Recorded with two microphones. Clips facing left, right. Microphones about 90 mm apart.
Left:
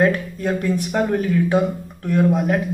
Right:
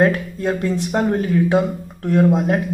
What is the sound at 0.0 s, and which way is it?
Speech, 30° right (ahead or behind).